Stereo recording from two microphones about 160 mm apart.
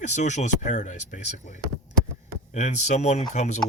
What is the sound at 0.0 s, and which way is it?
Speech, 50° left (ahead or behind).